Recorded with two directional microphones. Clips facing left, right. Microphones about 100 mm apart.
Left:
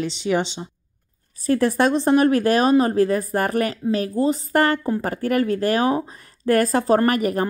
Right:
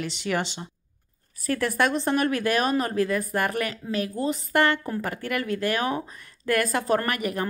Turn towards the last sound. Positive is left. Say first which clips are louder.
# left 8 dB
turn(degrees=40)  # may be behind; listen again after turning